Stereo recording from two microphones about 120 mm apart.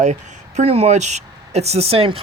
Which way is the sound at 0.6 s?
65° right (ahead or behind).